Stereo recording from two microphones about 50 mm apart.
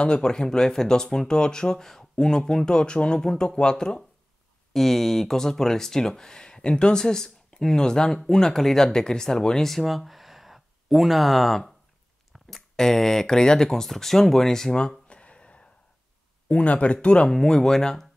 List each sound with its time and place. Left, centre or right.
0.0 s speech: centre
4.7 s speech: centre; by 17.3 s left
17.3 s speech: centre